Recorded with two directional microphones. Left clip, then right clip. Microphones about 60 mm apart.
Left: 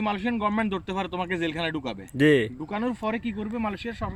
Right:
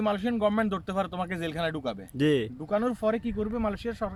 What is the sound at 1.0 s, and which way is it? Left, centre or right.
Speech, right.